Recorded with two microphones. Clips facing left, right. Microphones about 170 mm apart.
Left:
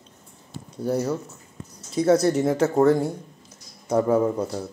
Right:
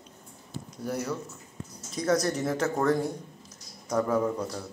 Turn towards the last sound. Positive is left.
turn(degrees=30)  # may be behind; listen again after turning